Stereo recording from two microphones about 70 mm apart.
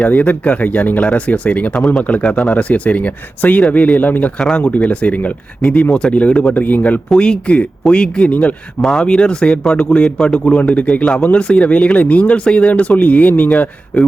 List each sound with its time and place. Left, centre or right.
0.0 s speech: left
7.1 s speech: centre
8.8 s speech: centre; by 13.7 s left